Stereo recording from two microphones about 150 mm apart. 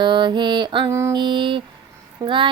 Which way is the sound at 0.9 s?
20° right (ahead or behind).